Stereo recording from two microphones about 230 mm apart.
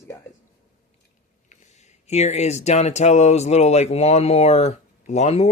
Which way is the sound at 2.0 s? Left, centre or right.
Left.